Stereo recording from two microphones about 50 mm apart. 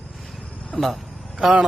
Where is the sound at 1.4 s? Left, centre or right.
Centre.